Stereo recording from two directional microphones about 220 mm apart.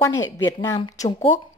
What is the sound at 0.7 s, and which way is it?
Speech, 20° left (ahead or behind).